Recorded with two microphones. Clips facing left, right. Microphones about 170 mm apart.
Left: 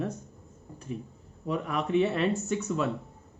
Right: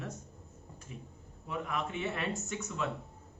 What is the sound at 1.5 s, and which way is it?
Speech, 35° left (ahead or behind).